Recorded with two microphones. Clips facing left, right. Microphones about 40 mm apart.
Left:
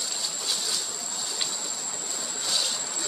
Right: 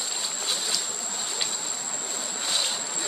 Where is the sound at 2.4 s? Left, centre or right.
Right.